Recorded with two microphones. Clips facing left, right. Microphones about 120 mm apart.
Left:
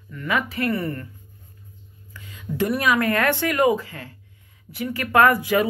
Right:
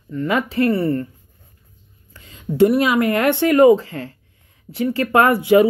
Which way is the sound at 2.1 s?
30° right (ahead or behind).